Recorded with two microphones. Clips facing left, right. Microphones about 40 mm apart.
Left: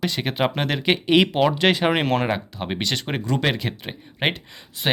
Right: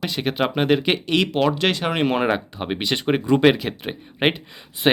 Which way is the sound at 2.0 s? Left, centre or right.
Centre.